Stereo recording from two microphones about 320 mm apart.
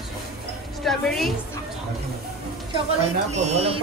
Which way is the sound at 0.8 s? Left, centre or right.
Centre.